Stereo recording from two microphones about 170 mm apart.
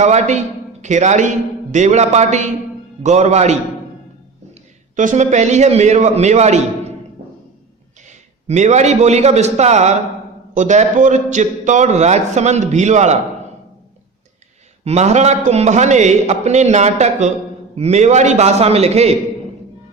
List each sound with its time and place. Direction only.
0.0 s a man's voice: 45° right (ahead or behind)
4.9 s a man's voice: 45° right (ahead or behind)
8.0 s a man's voice: 45° right (ahead or behind)
14.8 s a man's voice: 40° right (ahead or behind)